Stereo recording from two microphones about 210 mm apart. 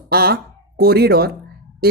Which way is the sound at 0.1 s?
45° right (ahead or behind).